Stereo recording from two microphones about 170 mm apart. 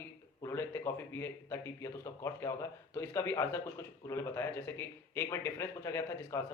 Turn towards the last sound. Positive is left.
turn(degrees=15)  # may be behind; listen again after turning